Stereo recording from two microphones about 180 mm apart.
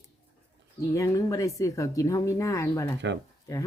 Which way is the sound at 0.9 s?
20° left (ahead or behind).